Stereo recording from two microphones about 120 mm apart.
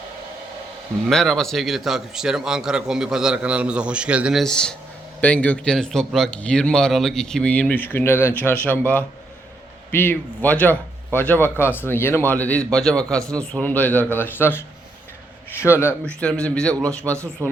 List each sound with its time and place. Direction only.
1.0 s a man's voice: 5° left (ahead or behind); by 15.8 s 20° left (ahead or behind)
16.0 s a man's voice: 10° left (ahead or behind)
17.4 s speech: 25° right (ahead or behind)